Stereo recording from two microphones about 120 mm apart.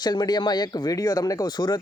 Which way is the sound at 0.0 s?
35° left (ahead or behind).